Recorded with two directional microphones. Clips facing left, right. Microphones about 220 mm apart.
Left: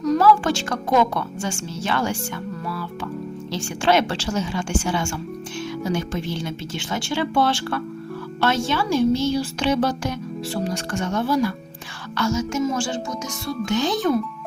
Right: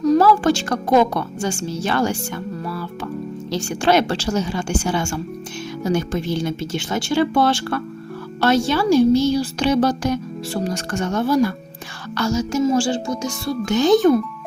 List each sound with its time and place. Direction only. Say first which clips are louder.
0.0 s a woman's voice: right 3 dB; 35° right (ahead or behind)
3.5 s a woman's voice: right 3 dB; 40° right (ahead or behind)
13.7 s speech: right 9 dB; 45° right (ahead or behind)